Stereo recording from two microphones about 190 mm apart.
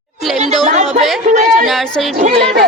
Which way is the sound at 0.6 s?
40° right (ahead or behind).